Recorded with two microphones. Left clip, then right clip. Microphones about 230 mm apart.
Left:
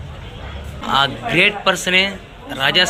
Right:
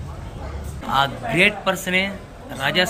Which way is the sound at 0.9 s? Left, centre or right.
Centre.